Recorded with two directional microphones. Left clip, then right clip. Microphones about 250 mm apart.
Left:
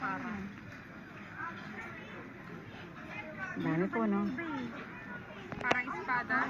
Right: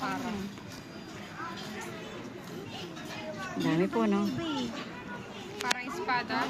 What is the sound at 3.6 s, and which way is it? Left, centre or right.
Speech, centre.